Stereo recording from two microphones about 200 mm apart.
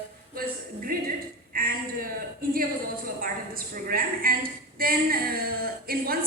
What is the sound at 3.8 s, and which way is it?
A woman's voice, 45° right (ahead or behind).